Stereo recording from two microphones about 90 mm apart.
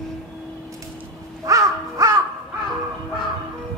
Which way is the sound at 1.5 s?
40° right (ahead or behind).